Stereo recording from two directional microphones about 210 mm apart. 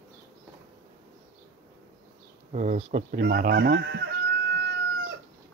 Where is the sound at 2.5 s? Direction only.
35° right (ahead or behind).